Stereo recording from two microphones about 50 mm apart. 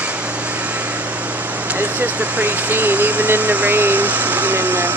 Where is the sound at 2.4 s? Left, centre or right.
Right.